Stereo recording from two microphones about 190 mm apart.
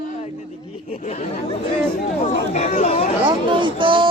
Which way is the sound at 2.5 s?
35° left (ahead or behind).